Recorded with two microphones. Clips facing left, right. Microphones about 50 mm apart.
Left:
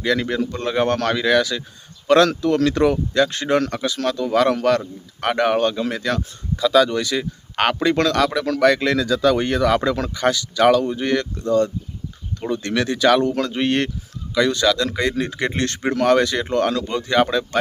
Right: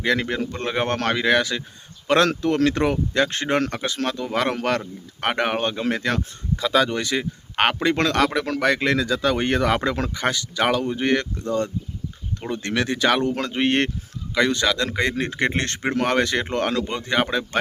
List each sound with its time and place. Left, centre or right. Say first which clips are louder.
0.0 s speech: left 2 dB; right